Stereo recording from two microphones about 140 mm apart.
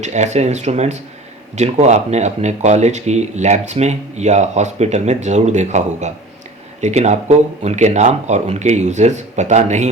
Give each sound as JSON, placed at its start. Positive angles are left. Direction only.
{"t": 0.0, "sound": "speech", "side_deg": -55}